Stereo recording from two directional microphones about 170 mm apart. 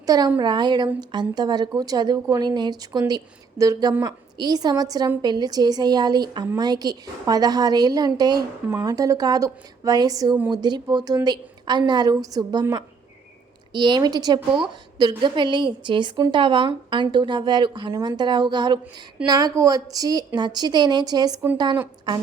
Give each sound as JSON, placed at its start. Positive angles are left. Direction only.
{"t": 0.0, "sound": "a woman's voice", "side_deg": -20}